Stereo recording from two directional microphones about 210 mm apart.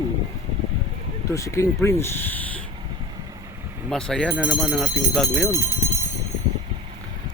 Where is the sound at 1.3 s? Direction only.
15° left (ahead or behind).